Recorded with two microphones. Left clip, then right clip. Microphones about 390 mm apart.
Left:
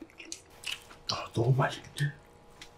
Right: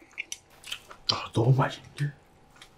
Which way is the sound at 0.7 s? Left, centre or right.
Left.